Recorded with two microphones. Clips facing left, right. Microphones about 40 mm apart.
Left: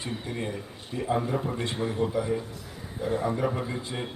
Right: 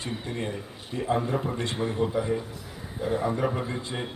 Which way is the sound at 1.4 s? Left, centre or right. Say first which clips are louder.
Right 1 dB; centre.